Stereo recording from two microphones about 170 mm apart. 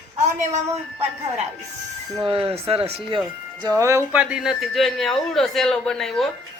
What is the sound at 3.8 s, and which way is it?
Speech, 15° right (ahead or behind).